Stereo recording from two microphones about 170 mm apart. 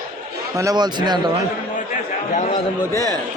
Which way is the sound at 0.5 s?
20° right (ahead or behind).